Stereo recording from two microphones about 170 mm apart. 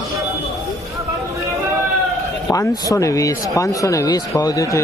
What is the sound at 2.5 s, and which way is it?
Speech, 20° left (ahead or behind).